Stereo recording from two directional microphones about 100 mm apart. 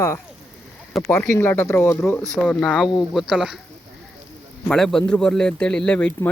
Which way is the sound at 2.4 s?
15° left (ahead or behind).